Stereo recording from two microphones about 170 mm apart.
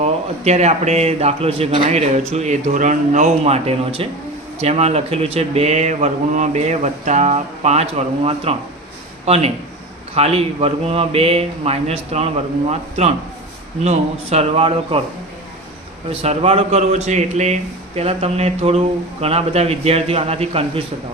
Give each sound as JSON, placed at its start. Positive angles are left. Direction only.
{"t": 0.0, "sound": "a man's voice", "side_deg": -40}
{"t": 16.0, "sound": "a man's voice", "side_deg": -35}